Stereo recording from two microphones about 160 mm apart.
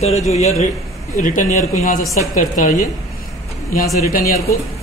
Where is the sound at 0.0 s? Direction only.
40° left (ahead or behind).